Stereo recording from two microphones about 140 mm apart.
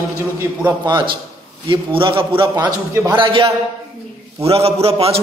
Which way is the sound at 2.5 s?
25° right (ahead or behind).